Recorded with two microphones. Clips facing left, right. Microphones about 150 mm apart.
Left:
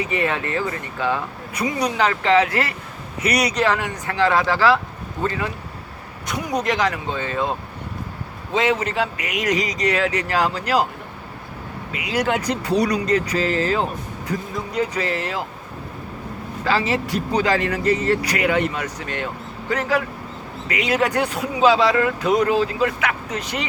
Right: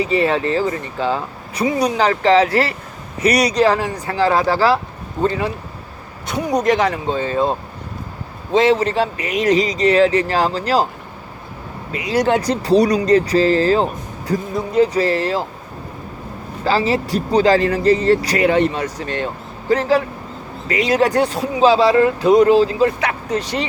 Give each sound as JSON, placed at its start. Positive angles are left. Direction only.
{"t": 0.0, "sound": "speech", "side_deg": -30}
{"t": 8.5, "sound": "speech", "side_deg": -35}
{"t": 11.9, "sound": "speech", "side_deg": -35}
{"t": 16.6, "sound": "speech", "side_deg": -30}